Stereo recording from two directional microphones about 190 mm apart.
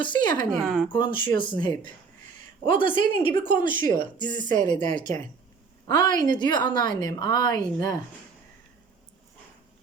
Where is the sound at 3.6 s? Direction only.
45° right (ahead or behind).